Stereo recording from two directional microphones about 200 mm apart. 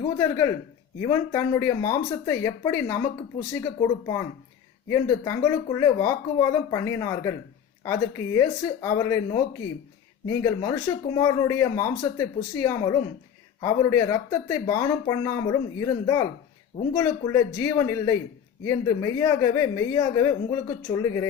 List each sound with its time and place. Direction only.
0.2 s speech: 15° left (ahead or behind)